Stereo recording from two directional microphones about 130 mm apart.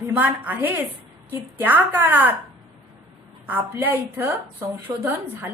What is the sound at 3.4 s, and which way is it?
A woman's voice, 15° right (ahead or behind).